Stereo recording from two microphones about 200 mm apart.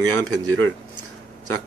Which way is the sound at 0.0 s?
90° right.